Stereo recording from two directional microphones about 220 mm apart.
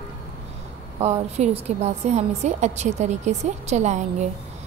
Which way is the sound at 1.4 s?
30° right (ahead or behind).